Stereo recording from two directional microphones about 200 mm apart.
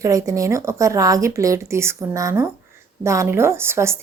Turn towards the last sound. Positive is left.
turn(degrees=-10)  # may be behind; listen again after turning